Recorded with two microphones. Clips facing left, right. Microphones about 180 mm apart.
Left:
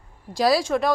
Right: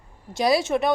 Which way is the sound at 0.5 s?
20° right (ahead or behind).